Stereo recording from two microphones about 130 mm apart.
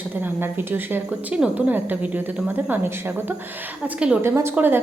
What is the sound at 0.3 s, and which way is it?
A woman's voice, 15° right (ahead or behind).